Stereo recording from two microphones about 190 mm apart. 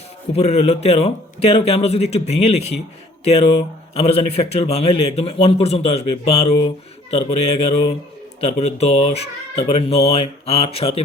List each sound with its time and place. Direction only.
0.3 s a man's voice: 35° left (ahead or behind)